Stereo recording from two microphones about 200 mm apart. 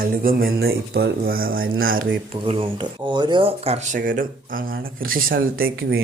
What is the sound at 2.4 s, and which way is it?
Speech, 25° right (ahead or behind).